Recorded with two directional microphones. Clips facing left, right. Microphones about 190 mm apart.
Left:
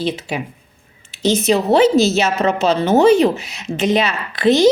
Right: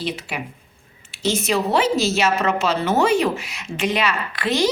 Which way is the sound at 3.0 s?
20° left (ahead or behind).